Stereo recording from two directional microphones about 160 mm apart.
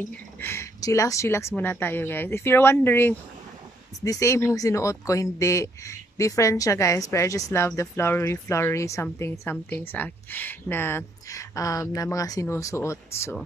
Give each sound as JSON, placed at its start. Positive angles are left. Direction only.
{"t": 0.4, "sound": "speech", "side_deg": 15}